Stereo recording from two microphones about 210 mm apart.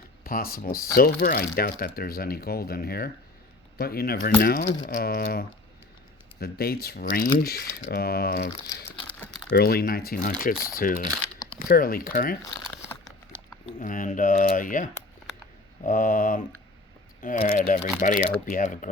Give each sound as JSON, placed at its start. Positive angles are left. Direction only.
{"t": 0.3, "sound": "speech", "side_deg": 45}
{"t": 9.5, "sound": "speech", "side_deg": 45}
{"t": 13.7, "sound": "speech", "side_deg": 40}